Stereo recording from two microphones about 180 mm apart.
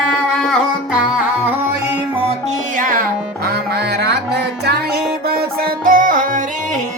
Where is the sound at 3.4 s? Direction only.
65° right (ahead or behind).